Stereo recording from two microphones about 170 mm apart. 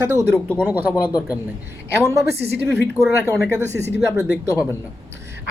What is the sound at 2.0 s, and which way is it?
Speech, 15° right (ahead or behind).